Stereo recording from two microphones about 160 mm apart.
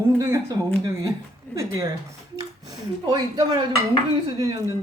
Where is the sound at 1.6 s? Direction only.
20° right (ahead or behind).